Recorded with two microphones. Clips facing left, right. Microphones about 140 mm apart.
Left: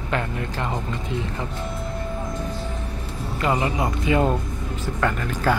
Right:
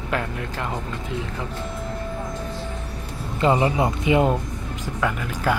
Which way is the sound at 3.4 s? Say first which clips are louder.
Right 4 dB; 25° right (ahead or behind).